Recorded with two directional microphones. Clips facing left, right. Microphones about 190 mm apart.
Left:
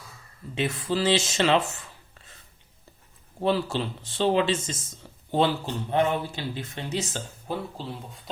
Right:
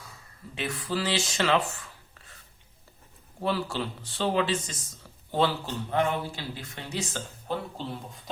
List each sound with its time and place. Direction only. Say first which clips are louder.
0.5 s speech: left 4 dB; 25° left (ahead or behind)
3.4 s speech: left 4 dB; 25° left (ahead or behind)